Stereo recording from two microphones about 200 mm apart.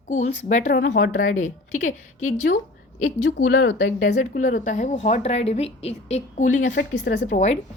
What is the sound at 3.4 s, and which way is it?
Speech, 45° left (ahead or behind).